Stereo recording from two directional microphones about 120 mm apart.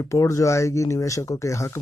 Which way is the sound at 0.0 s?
25° left (ahead or behind).